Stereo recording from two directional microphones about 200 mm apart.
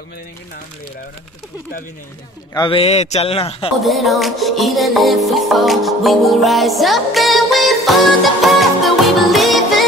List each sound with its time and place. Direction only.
2.5 s speech: 25° left (ahead or behind)
3.8 s music: centre (ahead or behind)